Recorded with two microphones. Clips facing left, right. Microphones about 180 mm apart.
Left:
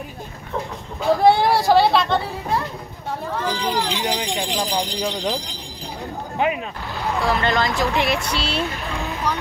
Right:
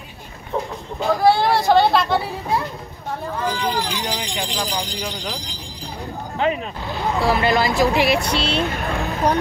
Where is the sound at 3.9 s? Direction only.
20° left (ahead or behind).